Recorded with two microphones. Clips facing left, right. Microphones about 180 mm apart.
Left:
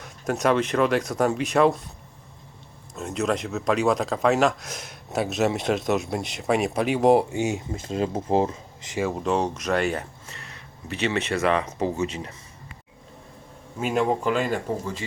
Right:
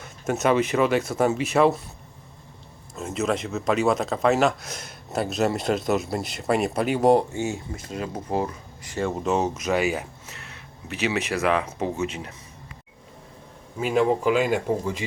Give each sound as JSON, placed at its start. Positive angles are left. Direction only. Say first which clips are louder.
{"t": 0.0, "sound": "speech", "louder": "even", "side_deg": -5}
{"t": 2.9, "sound": "speech", "louder": "even", "side_deg": 0}
{"t": 7.3, "sound": "speech", "louder": "left 2 dB", "side_deg": 15}
{"t": 9.0, "sound": "speech", "louder": "even", "side_deg": 0}
{"t": 13.7, "sound": "speech", "louder": "right 2 dB", "side_deg": 0}